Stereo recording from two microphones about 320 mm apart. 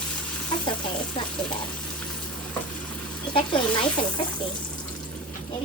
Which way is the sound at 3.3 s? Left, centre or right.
Centre.